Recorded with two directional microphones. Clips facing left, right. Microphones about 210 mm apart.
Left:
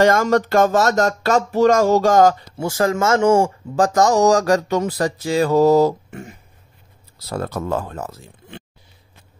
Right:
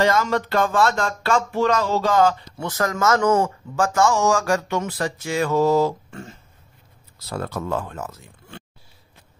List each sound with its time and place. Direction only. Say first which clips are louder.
0.0 s speech: left 5 dB; 45° left (ahead or behind)
2.5 s speech: left 5 dB; 25° left (ahead or behind)
6.0 s a sound: left 3 dB; 15° left (ahead or behind)
7.2 s speech: left 3 dB; 40° left (ahead or behind)